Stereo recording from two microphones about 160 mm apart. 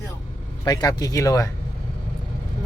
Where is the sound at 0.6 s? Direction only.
25° left (ahead or behind).